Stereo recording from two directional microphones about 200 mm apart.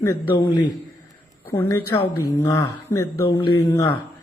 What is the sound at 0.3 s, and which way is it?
A woman's voice, 25° left (ahead or behind).